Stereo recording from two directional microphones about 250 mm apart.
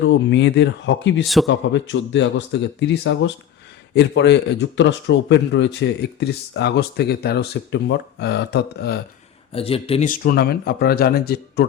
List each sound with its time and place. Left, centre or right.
0.0 s a man's voice: left
1.2 s a man's voice: centre
1.5 s a man's voice: left
9.5 s speech: left